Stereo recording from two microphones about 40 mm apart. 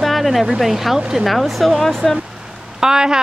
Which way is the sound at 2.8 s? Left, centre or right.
Centre.